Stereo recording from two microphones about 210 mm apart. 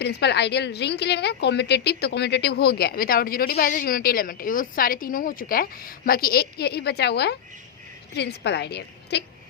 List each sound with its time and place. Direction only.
0.0 s a woman's voice: 55° left (ahead or behind)